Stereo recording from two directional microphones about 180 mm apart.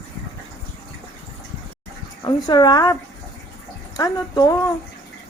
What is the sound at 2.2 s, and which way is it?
Speech, 25° left (ahead or behind).